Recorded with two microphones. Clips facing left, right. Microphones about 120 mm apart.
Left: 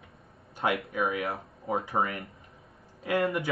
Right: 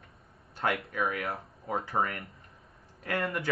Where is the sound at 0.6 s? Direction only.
15° left (ahead or behind).